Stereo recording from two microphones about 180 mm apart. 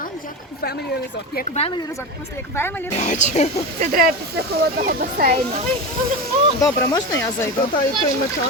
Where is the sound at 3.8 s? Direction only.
55° right (ahead or behind).